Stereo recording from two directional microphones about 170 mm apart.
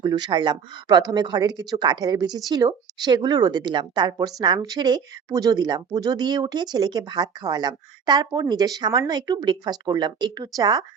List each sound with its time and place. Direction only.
0.0 s a woman's voice: 25° right (ahead or behind)